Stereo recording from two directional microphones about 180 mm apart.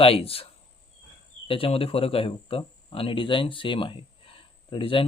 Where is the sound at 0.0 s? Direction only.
30° left (ahead or behind).